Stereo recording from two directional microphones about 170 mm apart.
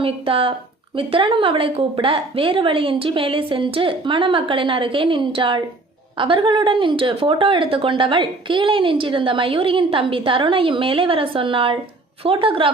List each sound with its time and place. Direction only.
0.0 s speech: 30° right (ahead or behind)